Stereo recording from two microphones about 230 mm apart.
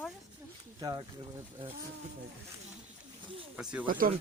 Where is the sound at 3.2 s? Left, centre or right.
Right.